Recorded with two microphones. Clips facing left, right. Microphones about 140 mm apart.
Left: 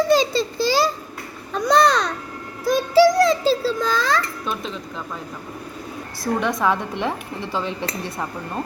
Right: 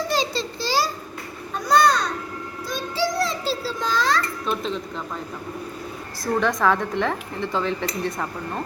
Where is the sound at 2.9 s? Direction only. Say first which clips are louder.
Left 10 dB; 90° left.